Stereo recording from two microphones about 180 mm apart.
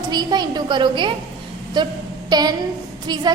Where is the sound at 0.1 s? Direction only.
25° right (ahead or behind).